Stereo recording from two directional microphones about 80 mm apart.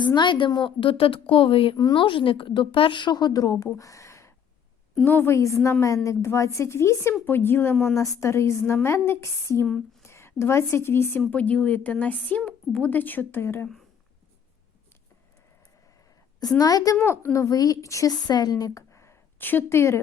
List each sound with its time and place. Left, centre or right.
0.0 s a woman's voice: left
1.7 s a woman's voice: left
2.0 s a woman's voice: left
3.8 s a sound: left
5.0 s speech: left
6.1 s speech: left
7.9 s a woman's voice: left
11.3 s speech: centre
16.6 s a woman's voice: left
17.0 s speech: left
17.4 s a woman's voice: left
18.8 s a sound: left